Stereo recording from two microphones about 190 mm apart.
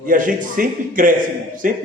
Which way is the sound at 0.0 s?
45° right (ahead or behind).